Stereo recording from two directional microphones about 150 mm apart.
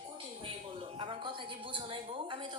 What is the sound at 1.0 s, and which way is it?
A woman's voice, 35° right (ahead or behind).